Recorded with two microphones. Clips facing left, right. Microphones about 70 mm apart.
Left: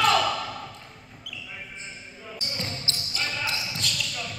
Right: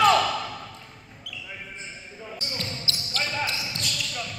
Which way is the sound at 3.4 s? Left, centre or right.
Centre.